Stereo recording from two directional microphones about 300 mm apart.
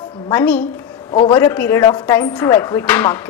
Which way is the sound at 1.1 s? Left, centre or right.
Centre.